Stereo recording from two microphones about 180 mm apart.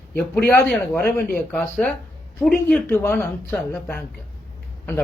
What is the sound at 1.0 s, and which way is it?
Speech, 60° left (ahead or behind).